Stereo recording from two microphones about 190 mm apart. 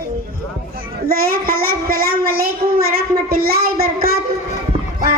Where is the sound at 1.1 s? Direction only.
50° right (ahead or behind).